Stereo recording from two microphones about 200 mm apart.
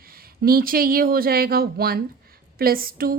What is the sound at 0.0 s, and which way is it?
A woman's voice, 50° right (ahead or behind).